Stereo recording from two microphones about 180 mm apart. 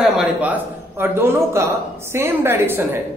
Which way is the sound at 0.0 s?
5° right (ahead or behind).